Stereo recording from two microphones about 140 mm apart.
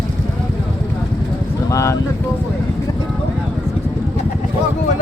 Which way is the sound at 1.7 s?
20° left (ahead or behind).